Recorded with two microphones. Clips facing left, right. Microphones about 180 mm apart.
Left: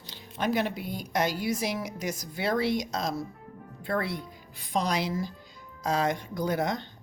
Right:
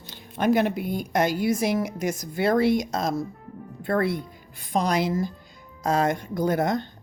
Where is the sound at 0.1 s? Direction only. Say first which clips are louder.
Right 7 dB; 50° right (ahead or behind).